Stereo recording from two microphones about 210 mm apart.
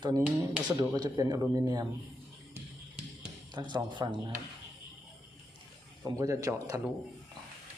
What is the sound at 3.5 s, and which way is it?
Speech, 20° right (ahead or behind).